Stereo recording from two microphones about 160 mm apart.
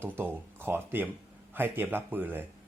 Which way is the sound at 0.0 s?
15° right (ahead or behind).